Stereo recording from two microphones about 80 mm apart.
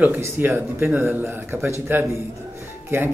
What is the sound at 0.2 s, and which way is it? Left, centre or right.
Speech, right.